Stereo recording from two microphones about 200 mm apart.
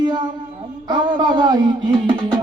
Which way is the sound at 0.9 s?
20° right (ahead or behind).